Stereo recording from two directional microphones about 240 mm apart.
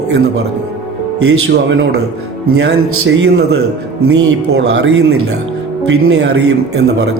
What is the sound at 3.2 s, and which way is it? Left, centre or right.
Speech, right.